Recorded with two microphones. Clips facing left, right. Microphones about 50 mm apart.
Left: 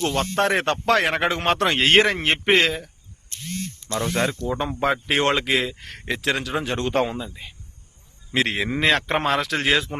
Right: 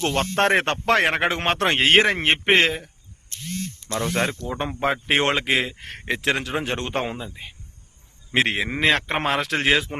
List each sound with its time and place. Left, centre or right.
0.0 s a man's voice: right
1.8 s speech: centre
2.2 s speech: right
3.9 s speech: centre
4.5 s a man's voice: right
6.9 s speech: centre
8.3 s a man's voice: right
9.1 s speech: right